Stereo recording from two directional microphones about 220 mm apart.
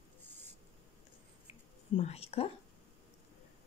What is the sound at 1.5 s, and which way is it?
Whispering, 25° left (ahead or behind).